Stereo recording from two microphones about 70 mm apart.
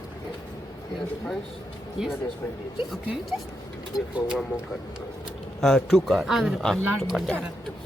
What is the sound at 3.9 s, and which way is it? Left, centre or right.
Speech, left.